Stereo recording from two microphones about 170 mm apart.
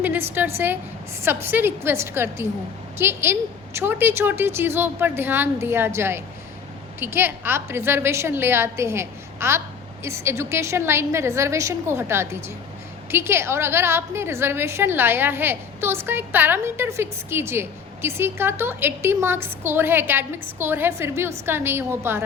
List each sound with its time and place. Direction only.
0.0 s a woman's voice: 10° right (ahead or behind)